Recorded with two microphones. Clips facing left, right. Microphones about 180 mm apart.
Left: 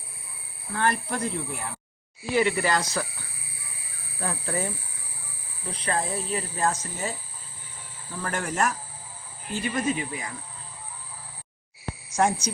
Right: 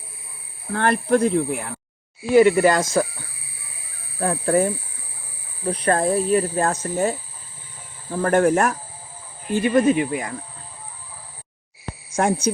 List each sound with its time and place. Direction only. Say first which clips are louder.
0.7 s speech: right 8 dB; 60° right (ahead or behind)
2.3 s speech: right 9 dB; 45° right (ahead or behind)
12.1 s speech: right 3 dB; 55° right (ahead or behind)